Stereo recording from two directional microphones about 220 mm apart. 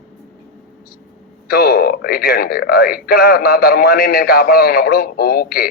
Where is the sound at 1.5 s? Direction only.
45° left (ahead or behind).